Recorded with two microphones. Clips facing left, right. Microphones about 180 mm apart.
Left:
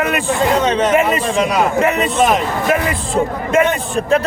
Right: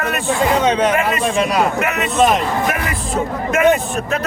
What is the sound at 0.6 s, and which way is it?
Speech, 10° right (ahead or behind).